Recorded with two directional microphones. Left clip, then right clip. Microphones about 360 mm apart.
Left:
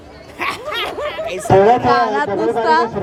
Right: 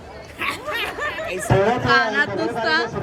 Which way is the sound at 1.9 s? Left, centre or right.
Centre.